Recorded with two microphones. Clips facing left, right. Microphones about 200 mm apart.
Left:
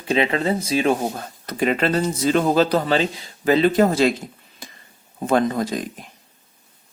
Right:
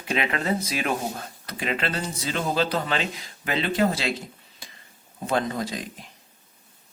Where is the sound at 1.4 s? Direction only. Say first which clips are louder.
Left 9 dB; 45° left (ahead or behind).